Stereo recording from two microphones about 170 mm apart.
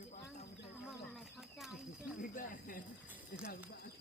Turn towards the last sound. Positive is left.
turn(degrees=60)  # may be behind; listen again after turning